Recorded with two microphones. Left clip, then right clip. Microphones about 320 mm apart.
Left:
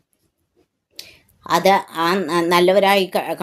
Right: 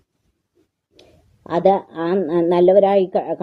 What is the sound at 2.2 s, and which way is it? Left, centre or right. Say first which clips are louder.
Speech: right 1 dB; left.